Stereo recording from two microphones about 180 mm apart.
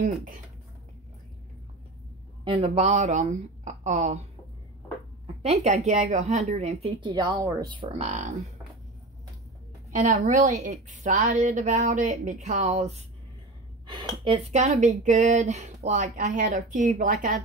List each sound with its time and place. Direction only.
0.0 s speech: 45° right (ahead or behind)
2.4 s speech: 30° right (ahead or behind)
5.2 s speech: 35° right (ahead or behind)
10.0 s speech: 45° right (ahead or behind)
14.2 s speech: 35° right (ahead or behind)